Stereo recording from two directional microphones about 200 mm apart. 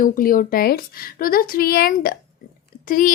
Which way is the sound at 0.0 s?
45° left (ahead or behind).